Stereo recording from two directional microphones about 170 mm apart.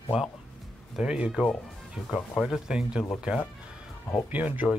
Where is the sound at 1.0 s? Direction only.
5° right (ahead or behind).